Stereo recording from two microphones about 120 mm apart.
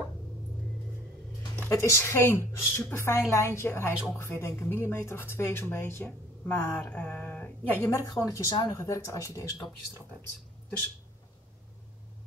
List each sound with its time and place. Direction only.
1.7 s a woman's voice: 25° left (ahead or behind)
7.9 s a woman's voice: 25° left (ahead or behind)